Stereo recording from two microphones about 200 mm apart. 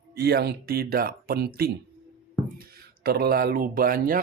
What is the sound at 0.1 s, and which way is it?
Speech, 50° right (ahead or behind).